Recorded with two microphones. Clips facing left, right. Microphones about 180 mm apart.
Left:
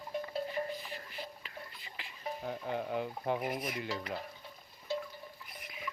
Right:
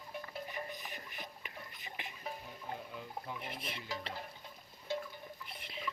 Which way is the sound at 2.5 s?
70° left (ahead or behind).